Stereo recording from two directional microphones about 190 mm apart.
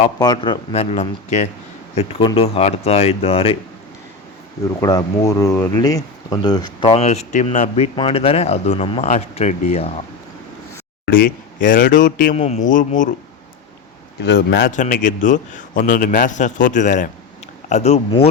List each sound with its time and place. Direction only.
0.2 s speech: 25° left (ahead or behind)
4.8 s speech: 20° left (ahead or behind); by 9.9 s 35° left (ahead or behind)
11.6 s a man's voice: 45° left (ahead or behind)
14.3 s a man's voice: 65° left (ahead or behind)
14.7 s a man's voice: 40° left (ahead or behind)